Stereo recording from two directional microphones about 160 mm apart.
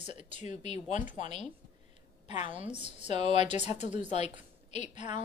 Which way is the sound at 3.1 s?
45° left (ahead or behind).